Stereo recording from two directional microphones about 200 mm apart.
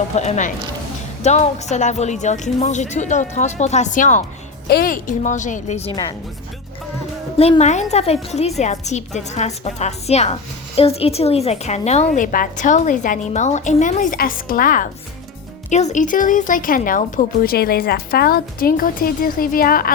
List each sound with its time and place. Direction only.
0.2 s a woman's voice: 35° left (ahead or behind)
5.9 s speech: 20° left (ahead or behind)
7.3 s a woman's voice: 30° left (ahead or behind); by 19.9 s 45° left (ahead or behind)